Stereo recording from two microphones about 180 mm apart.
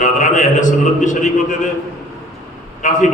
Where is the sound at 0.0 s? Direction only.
45° left (ahead or behind).